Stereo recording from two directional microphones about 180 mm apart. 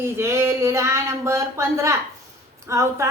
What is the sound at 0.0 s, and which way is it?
A woman's voice, 15° right (ahead or behind).